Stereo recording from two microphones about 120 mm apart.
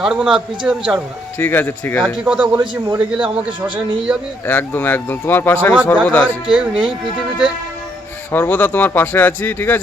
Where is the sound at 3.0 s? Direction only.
10° right (ahead or behind).